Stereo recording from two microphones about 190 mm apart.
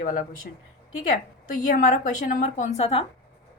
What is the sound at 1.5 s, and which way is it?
A woman's voice, 40° left (ahead or behind).